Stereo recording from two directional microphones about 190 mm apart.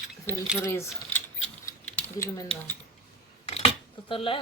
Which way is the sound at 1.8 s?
10° left (ahead or behind).